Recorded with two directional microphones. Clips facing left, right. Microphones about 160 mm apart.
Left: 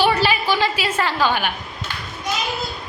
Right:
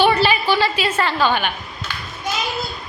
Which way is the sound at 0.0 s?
10° left (ahead or behind).